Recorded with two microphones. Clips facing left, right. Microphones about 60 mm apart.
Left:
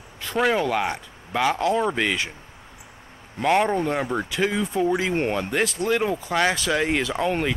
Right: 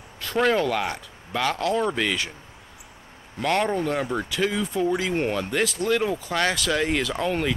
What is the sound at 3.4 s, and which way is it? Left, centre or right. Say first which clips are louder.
Speech: left 3 dB; centre.